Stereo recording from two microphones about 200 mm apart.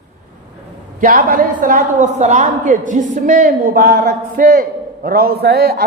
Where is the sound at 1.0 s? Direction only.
45° right (ahead or behind).